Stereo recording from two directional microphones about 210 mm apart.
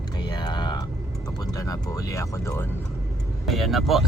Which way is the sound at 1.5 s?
15° left (ahead or behind).